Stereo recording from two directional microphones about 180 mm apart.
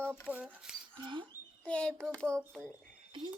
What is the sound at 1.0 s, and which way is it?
Speech, 25° right (ahead or behind).